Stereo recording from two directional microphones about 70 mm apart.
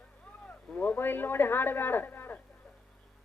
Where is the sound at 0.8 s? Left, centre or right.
Left.